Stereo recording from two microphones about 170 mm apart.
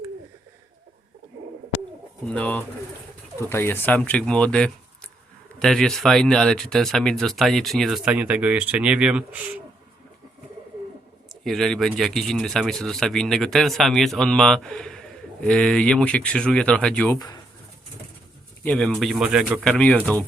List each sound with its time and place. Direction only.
2.3 s speech: 10° left (ahead or behind)
11.4 s speech: centre (ahead or behind)
17.2 s speech: 25° left (ahead or behind)
18.6 s speech: 10° left (ahead or behind)
19.6 s speech: 5° left (ahead or behind)